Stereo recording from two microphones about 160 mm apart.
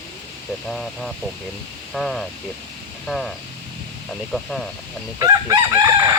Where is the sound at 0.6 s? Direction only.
Centre (ahead or behind).